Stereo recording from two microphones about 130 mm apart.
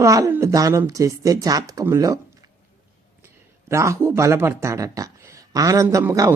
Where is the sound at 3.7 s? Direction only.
20° right (ahead or behind).